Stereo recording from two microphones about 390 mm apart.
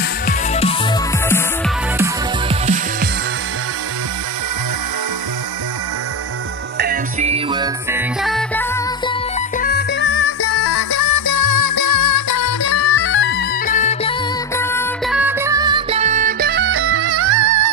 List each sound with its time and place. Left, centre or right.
0.3 s music: centre
2.6 s music: centre
6.8 s music: centre
9.6 s music: left
10.8 s music: left; by 14.1 s centre
14.6 s music: centre; by 17.6 s right